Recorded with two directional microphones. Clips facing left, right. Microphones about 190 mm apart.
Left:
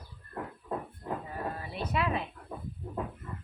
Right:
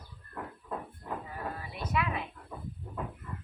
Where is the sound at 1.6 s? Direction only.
30° left (ahead or behind).